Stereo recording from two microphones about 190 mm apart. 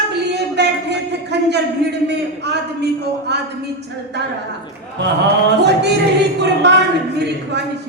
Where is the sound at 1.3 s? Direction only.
65° right (ahead or behind).